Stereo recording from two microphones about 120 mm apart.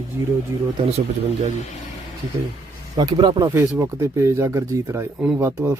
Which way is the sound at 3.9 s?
25° right (ahead or behind).